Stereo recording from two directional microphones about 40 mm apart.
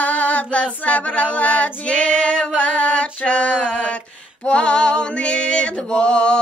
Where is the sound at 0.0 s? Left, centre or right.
Left.